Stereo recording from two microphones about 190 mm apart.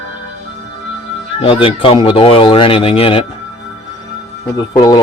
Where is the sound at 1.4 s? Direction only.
30° left (ahead or behind).